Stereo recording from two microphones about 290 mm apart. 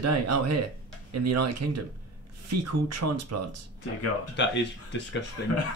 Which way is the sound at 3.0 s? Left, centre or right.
Right.